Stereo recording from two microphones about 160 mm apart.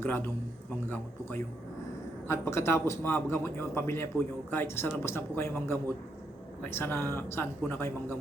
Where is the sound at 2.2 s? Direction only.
15° left (ahead or behind).